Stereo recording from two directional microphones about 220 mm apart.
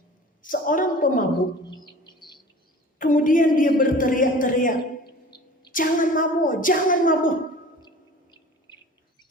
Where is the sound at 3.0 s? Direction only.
40° left (ahead or behind).